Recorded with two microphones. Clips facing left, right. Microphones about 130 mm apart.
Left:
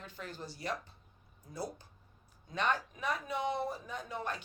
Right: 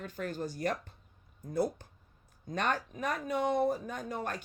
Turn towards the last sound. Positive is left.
turn(degrees=-45)  # may be behind; listen again after turning